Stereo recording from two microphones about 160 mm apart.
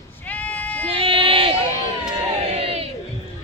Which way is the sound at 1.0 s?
35° right (ahead or behind).